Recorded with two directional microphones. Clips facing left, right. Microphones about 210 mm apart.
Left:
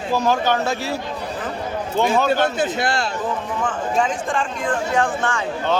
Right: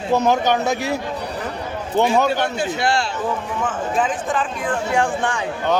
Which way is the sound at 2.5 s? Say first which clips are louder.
Right 1 dB; 50° left (ahead or behind).